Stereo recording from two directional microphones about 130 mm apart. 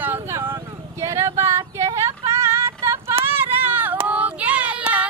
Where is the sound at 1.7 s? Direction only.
25° right (ahead or behind).